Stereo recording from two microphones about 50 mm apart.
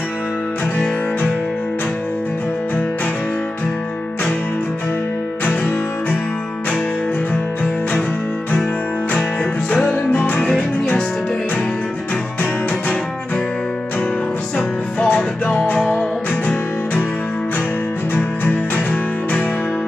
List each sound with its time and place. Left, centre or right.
5.4 s music: left
10.1 s music: left
15.0 s music: left
18.1 s music: left